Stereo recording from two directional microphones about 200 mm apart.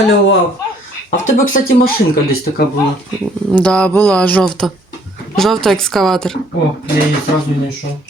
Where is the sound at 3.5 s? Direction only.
5° left (ahead or behind).